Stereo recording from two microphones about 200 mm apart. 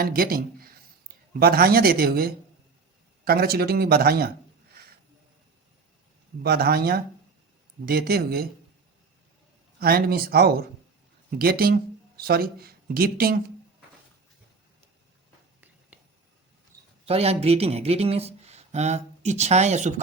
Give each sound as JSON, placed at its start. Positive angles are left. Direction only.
{"t": 0.0, "sound": "a man's voice", "side_deg": -45}
{"t": 6.4, "sound": "a man's voice", "side_deg": -50}
{"t": 9.8, "sound": "a man's voice", "side_deg": -50}
{"t": 16.7, "sound": "a sound", "side_deg": -15}
{"t": 17.1, "sound": "speech", "side_deg": -30}